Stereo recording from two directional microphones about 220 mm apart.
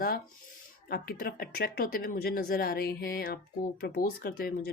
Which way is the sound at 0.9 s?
45° left (ahead or behind).